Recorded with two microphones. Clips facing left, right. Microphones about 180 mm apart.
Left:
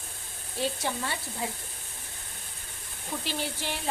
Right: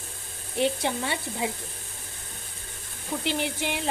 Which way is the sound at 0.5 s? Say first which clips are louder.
Right 5 dB; 20° right (ahead or behind).